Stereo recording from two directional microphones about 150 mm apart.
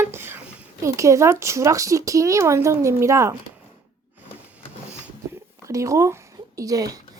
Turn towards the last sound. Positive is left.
turn(degrees=-25)  # may be behind; listen again after turning